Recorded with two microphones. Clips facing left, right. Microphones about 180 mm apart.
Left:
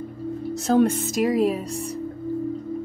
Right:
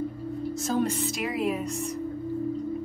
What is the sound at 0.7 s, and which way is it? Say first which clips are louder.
Music: left 9 dB; 60° left (ahead or behind).